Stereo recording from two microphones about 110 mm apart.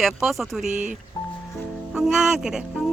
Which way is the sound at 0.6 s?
90° right.